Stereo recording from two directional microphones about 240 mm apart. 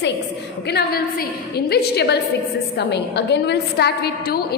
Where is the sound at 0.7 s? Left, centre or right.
Left.